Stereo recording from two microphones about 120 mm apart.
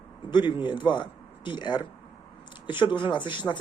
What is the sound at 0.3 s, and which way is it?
Speech, 40° left (ahead or behind).